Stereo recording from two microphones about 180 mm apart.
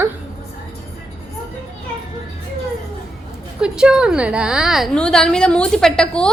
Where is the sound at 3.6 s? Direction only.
5° right (ahead or behind).